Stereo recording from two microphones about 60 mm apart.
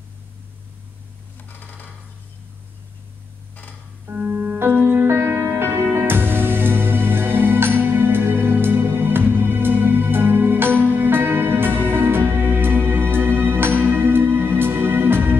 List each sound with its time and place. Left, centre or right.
4.3 s music: right